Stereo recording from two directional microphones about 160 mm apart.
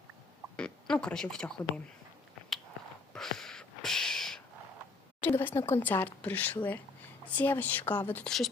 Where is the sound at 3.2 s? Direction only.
Centre (ahead or behind).